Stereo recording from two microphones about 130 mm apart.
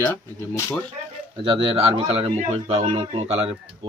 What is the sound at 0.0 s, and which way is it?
Speech, 20° left (ahead or behind).